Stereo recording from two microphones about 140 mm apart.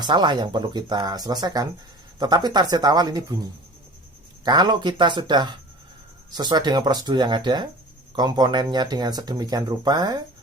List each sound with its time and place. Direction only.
0.0 s speech: 30° right (ahead or behind)